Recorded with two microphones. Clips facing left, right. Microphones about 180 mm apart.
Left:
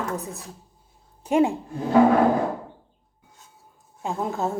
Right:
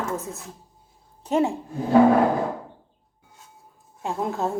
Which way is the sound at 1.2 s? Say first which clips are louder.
Left 2 dB; 10° left (ahead or behind).